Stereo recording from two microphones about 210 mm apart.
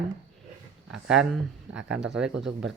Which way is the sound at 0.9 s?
5° right (ahead or behind).